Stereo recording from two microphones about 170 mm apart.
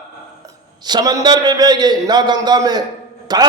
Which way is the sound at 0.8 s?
25° right (ahead or behind).